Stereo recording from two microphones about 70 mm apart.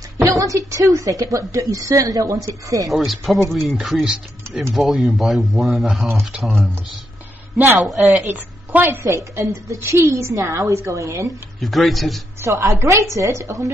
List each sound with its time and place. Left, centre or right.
0.2 s a woman's voice: right
3.4 s speech: centre
7.5 s a man's voice: right
8.9 s a woman's voice: right
11.6 s speech: centre
12.4 s a woman's voice: right